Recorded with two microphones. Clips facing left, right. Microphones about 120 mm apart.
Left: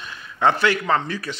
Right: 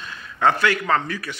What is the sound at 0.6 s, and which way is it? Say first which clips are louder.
Speech: left 1 dB; 20° left (ahead or behind).